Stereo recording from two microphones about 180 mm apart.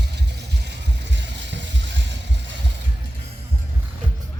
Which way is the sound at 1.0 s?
80° right.